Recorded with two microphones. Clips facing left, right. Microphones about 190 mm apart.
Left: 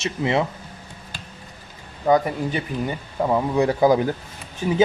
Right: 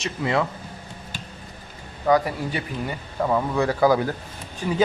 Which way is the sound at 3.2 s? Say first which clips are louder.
Left 2 dB; 15° left (ahead or behind).